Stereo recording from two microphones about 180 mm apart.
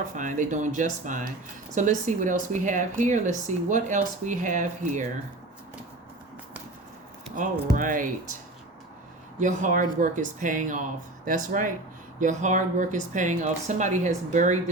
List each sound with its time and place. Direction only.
0.2 s speech: 45° right (ahead or behind)
7.8 s speech: 50° right (ahead or behind)
9.4 s speech: 45° right (ahead or behind)